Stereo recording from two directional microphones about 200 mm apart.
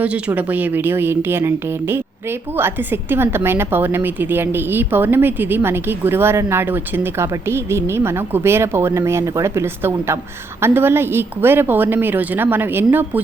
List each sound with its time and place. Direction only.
0.0 s a woman's voice: 10° right (ahead or behind)